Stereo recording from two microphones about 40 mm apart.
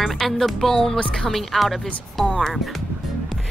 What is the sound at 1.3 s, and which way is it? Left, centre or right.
A woman's voice, centre.